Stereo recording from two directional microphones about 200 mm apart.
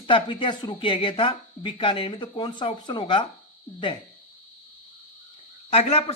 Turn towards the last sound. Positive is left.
turn(degrees=30)  # may be behind; listen again after turning